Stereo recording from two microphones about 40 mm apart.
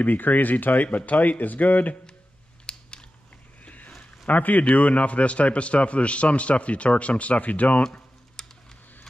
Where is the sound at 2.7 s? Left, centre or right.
Left.